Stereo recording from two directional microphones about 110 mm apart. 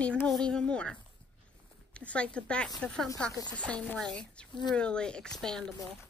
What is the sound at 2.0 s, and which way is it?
Speech, 10° left (ahead or behind).